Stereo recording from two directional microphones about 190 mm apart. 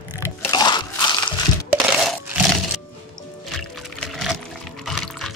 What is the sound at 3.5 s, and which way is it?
Music, centre (ahead or behind).